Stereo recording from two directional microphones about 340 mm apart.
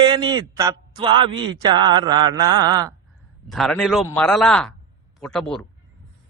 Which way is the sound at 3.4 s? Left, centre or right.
Centre.